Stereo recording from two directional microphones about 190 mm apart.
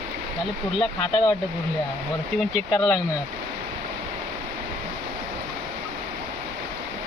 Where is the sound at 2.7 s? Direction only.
20° left (ahead or behind).